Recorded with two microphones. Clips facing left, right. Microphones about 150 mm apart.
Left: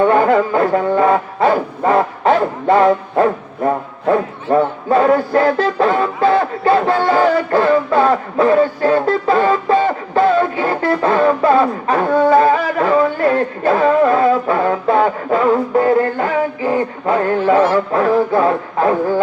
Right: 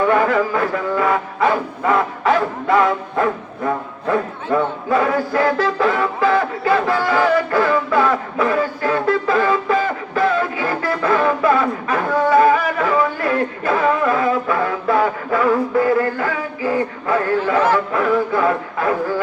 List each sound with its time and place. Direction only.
0.0 s bow-wow: 30° left (ahead or behind)
4.5 s music: 35° left (ahead or behind)